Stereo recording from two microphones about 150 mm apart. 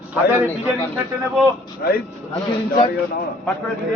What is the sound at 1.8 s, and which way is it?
Speech, 90° left.